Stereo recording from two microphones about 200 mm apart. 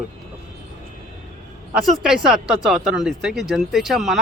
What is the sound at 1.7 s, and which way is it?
Speech, centre (ahead or behind).